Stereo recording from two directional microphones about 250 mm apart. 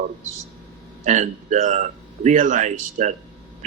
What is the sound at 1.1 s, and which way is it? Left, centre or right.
A man's voice, right.